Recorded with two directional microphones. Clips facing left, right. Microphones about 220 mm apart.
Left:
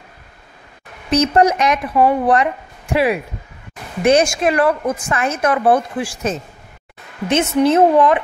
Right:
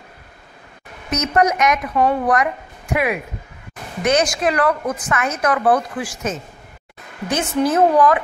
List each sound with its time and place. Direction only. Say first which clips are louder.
1.1 s a woman's voice: left 4 dB; 30° left (ahead or behind)